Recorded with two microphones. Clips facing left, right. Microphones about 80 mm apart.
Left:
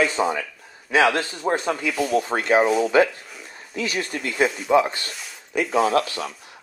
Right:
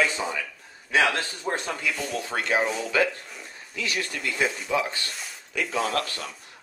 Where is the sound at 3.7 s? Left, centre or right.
Left.